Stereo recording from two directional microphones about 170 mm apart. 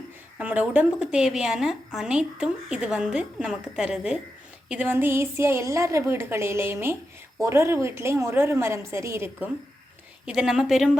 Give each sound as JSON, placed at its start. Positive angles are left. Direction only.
{"t": 0.3, "sound": "a woman's voice", "side_deg": -10}
{"t": 10.2, "sound": "a woman's voice", "side_deg": -5}